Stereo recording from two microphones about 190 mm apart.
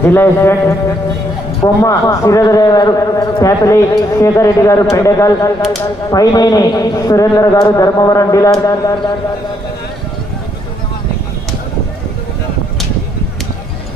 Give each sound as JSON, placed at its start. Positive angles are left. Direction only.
{"t": 0.0, "sound": "a man's voice", "side_deg": 10}